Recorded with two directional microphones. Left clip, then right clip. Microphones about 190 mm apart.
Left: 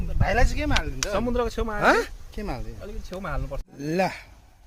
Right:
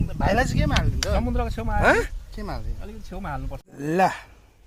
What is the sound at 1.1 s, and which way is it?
Speech, 30° left (ahead or behind).